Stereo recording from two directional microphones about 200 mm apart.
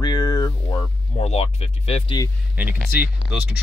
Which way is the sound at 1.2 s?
30° left (ahead or behind).